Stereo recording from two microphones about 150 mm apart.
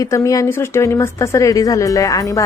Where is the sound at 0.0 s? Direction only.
20° left (ahead or behind).